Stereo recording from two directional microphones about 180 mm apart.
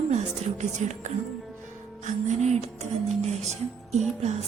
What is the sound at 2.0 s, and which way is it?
Music, 40° right (ahead or behind).